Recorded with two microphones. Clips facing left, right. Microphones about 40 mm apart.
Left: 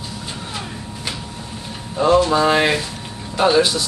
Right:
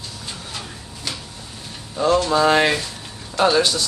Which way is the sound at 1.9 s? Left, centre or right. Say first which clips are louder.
Left 3 dB; centre.